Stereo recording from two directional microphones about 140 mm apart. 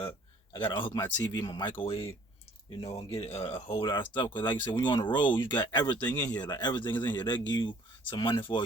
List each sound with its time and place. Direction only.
0.9 s speech: 10° left (ahead or behind)
1.3 s speech: 25° left (ahead or behind)
1.8 s speech: 40° left (ahead or behind)
4.3 s speech: 15° left (ahead or behind)
4.6 s speech: 30° left (ahead or behind)